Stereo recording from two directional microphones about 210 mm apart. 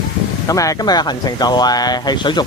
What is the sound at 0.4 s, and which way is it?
Speech, 15° left (ahead or behind).